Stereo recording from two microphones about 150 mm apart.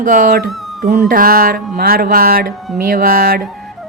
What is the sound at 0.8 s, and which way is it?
Music, 70° right (ahead or behind).